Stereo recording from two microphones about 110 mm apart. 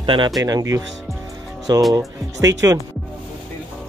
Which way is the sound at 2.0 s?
30° right (ahead or behind).